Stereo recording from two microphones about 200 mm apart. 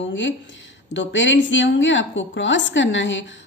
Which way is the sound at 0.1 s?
65° left (ahead or behind).